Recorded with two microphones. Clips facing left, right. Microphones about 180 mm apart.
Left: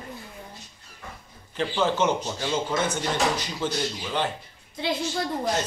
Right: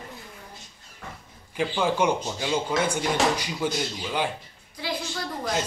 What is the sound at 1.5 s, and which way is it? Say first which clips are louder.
A man's voice: even; 10° right (ahead or behind).